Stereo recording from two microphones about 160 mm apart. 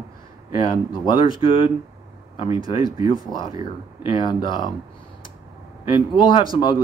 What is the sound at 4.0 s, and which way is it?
Speech, 30° left (ahead or behind).